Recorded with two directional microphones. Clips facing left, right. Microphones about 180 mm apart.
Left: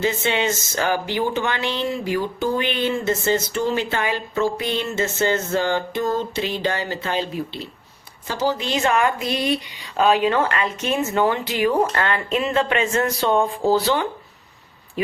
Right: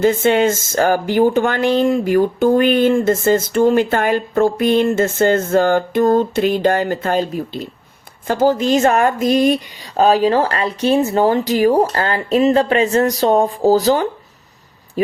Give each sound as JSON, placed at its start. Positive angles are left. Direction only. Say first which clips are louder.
{"t": 0.0, "sound": "speech", "louder": "right 8 dB", "side_deg": -50}